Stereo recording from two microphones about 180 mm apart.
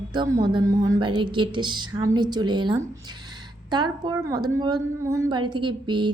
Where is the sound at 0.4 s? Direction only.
25° right (ahead or behind).